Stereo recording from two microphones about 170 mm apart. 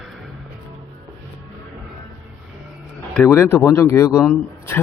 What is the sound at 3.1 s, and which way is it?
A man's voice, 15° left (ahead or behind).